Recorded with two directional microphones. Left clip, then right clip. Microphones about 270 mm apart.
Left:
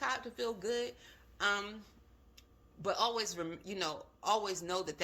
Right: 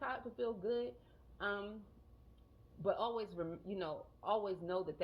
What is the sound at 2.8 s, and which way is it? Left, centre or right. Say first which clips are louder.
A woman's voice: left 4 dB; left.